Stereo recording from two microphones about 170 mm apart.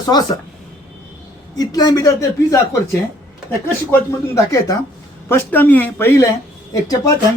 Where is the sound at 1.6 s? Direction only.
20° left (ahead or behind).